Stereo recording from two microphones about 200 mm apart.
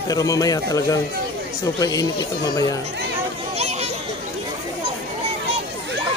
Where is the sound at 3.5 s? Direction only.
30° right (ahead or behind).